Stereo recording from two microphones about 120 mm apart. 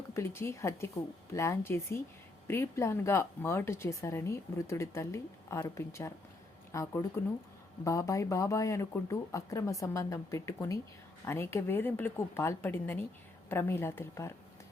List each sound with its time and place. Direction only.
0.1 s speech: 20° left (ahead or behind)